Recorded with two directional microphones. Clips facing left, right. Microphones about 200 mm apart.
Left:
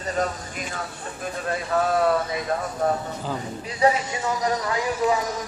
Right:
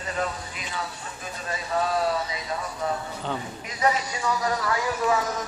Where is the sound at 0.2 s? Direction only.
45° left (ahead or behind).